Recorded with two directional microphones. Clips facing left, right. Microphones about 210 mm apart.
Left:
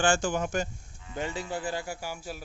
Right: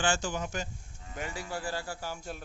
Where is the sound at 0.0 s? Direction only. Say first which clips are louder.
Left 5 dB; 50° left (ahead or behind).